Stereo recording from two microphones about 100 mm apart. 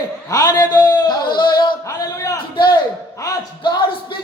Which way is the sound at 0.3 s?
40° left (ahead or behind).